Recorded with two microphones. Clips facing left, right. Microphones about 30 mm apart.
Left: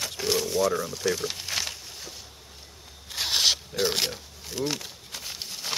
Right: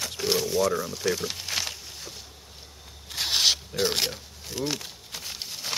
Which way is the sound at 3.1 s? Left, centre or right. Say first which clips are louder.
Even; centre.